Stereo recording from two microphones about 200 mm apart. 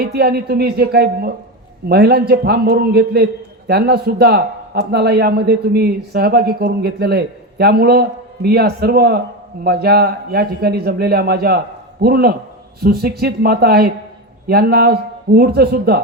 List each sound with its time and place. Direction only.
0.0 s a man's voice: 50° right (ahead or behind)